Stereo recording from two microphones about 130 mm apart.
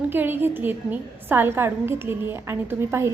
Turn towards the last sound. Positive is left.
turn(degrees=-20)  # may be behind; listen again after turning